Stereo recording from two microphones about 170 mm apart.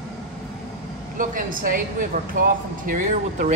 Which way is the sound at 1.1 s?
50° right (ahead or behind).